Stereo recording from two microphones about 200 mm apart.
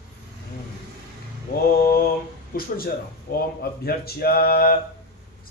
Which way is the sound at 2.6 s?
50° left (ahead or behind).